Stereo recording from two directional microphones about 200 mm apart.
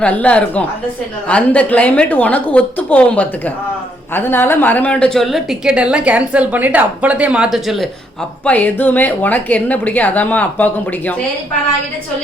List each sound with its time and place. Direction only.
0.0 s a woman's voice: 5° left (ahead or behind)